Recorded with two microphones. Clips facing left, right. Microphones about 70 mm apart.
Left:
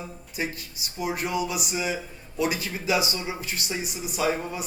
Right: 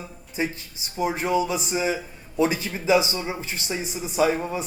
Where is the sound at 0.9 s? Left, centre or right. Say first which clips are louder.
Right 5 dB; right.